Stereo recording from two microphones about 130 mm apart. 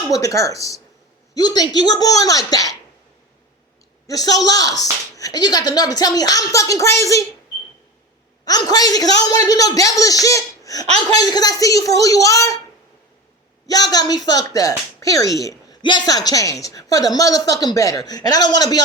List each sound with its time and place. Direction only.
0.1 s a woman's voice: 25° left (ahead or behind)
4.0 s a man's voice: 30° left (ahead or behind)
8.4 s a woman's voice: 30° left (ahead or behind)
13.7 s a woman's voice: 30° left (ahead or behind)
15.8 s a woman's voice: 35° left (ahead or behind)